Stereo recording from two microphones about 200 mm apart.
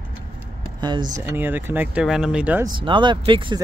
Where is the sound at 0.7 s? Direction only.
20° right (ahead or behind).